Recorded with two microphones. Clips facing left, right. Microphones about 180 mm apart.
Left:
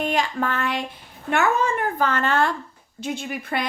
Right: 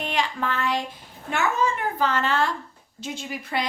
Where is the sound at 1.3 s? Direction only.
55° left (ahead or behind).